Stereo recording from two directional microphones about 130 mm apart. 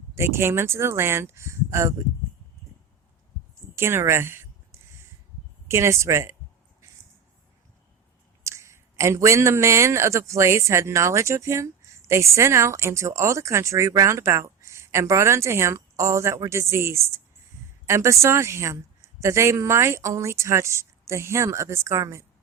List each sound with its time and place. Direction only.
0.1 s speech: 20° right (ahead or behind)
3.8 s speech: 20° right (ahead or behind)
5.6 s speech: 20° right (ahead or behind)
8.4 s speech: 20° right (ahead or behind)